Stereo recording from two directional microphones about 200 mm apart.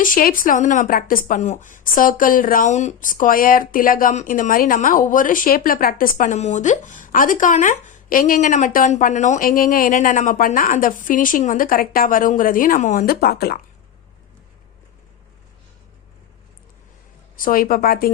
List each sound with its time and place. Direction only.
0.0 s a woman's voice: 45° left (ahead or behind)
17.3 s a woman's voice: 45° left (ahead or behind)